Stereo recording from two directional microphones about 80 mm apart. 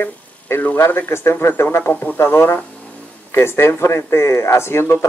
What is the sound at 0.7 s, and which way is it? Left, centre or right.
A man's voice, left.